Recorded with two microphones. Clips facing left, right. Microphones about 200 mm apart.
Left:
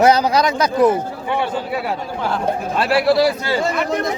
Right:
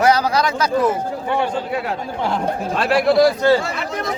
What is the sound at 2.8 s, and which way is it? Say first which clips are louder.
Speech: right 1 dB; 5° left (ahead or behind).